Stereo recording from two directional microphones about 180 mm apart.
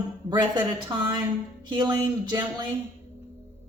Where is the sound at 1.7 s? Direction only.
25° right (ahead or behind).